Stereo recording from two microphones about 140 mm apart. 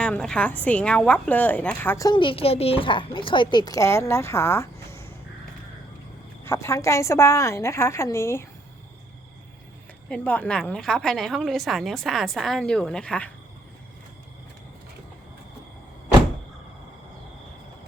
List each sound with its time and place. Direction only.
0.0 s a woman's voice: 5° left (ahead or behind)
2.0 s a woman's voice: 35° left (ahead or behind); by 5.0 s 20° left (ahead or behind)
6.4 s a woman's voice: 20° left (ahead or behind)
10.1 s a woman's voice: 10° left (ahead or behind)